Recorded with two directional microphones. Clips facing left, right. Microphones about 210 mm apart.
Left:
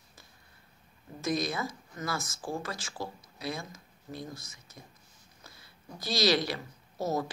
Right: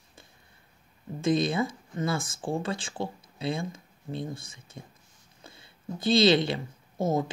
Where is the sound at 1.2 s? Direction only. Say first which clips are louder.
Right 6 dB; 25° right (ahead or behind).